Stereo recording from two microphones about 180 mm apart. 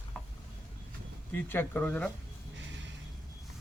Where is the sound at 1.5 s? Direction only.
10° left (ahead or behind).